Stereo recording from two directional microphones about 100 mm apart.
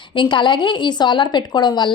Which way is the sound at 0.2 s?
50° left (ahead or behind).